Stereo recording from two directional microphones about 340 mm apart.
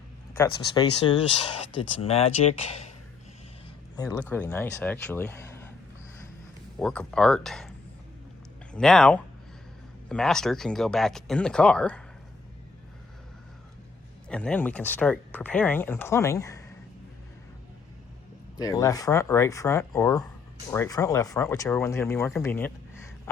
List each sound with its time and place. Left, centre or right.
1.0 s speech: centre
3.9 s speech: centre
6.7 s speech: centre
8.7 s speech: centre
14.3 s speech: centre
18.5 s speech: centre